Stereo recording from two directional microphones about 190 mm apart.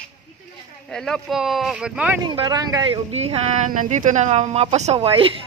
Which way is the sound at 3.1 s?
35° right (ahead or behind).